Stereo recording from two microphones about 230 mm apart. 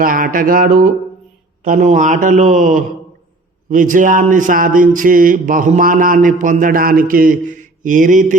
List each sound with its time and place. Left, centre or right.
0.0 s speech: right